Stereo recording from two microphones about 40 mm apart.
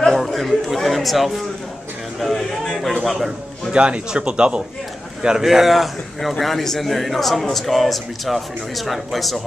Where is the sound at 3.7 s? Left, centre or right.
Right.